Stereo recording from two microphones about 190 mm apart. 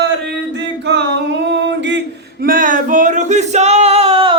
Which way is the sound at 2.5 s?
45° right (ahead or behind).